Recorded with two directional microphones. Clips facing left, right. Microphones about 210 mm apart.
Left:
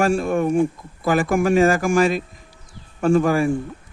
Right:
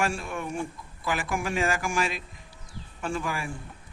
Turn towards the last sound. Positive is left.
turn(degrees=45)  # may be behind; listen again after turning